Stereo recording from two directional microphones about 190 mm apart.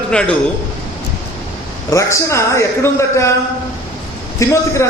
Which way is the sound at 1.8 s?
15° left (ahead or behind).